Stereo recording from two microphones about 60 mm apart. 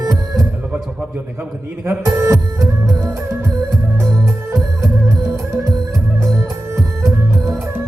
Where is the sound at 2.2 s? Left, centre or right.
Right.